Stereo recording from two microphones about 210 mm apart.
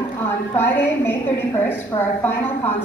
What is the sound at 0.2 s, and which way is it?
A woman's voice, 10° left (ahead or behind).